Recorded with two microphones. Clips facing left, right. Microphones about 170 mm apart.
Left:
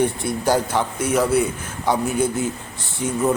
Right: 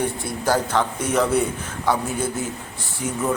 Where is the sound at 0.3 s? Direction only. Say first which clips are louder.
Left 2 dB; 15° left (ahead or behind).